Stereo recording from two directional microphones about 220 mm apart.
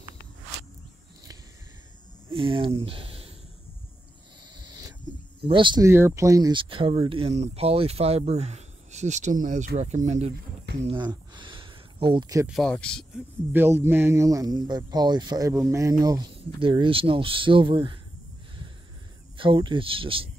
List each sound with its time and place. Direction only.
2.3 s speech: 25° right (ahead or behind)
4.6 s a sound: 15° right (ahead or behind)
5.4 s speech: 20° right (ahead or behind)
12.4 s speech: centre (ahead or behind)
13.5 s speech: 10° right (ahead or behind)
19.3 s speech: 25° right (ahead or behind)